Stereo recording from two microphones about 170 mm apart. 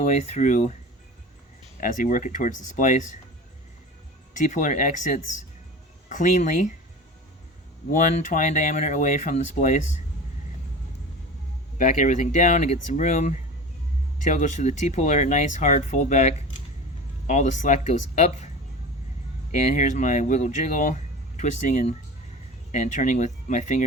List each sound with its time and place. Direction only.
0.0 s speech: 40° left (ahead or behind)
1.8 s speech: 50° left (ahead or behind)
4.4 s speech: 50° left (ahead or behind)
7.9 s speech: 50° left (ahead or behind)
11.8 s speech: 45° left (ahead or behind)